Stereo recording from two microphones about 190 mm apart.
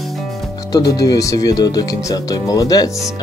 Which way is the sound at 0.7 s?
20° left (ahead or behind).